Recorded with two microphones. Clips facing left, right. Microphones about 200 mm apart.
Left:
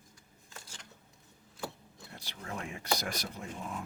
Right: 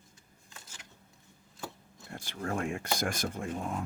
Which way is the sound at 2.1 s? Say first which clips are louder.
Right 8 dB; 50° right (ahead or behind).